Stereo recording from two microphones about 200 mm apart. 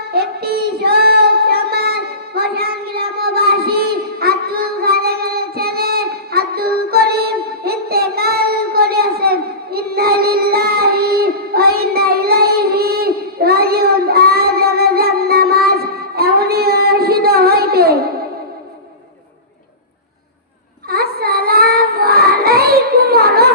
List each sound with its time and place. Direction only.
0.1 s child singing: 50° right (ahead or behind)
20.9 s child singing: 50° right (ahead or behind)